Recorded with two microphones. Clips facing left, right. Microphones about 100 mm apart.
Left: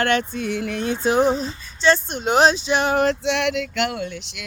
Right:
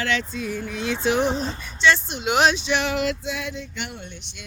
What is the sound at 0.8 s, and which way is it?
Speech, 40° left (ahead or behind).